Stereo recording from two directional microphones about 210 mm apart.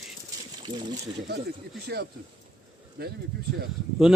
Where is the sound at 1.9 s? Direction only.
50° right (ahead or behind).